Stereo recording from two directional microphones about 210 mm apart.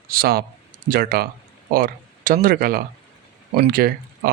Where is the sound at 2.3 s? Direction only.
45° right (ahead or behind).